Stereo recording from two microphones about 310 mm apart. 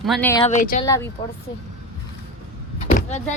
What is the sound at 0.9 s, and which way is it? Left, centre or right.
Speech, centre.